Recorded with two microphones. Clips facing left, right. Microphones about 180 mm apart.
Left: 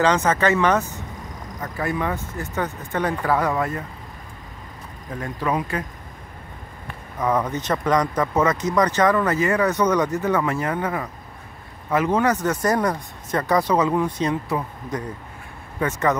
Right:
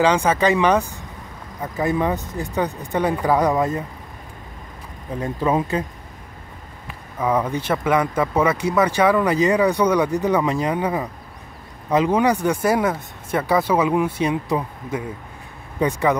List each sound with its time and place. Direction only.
0.0 s speech: 10° right (ahead or behind)
5.2 s speech: 25° right (ahead or behind)
7.2 s speech: 10° right (ahead or behind)